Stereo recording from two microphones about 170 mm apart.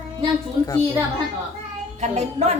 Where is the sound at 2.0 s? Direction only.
40° right (ahead or behind).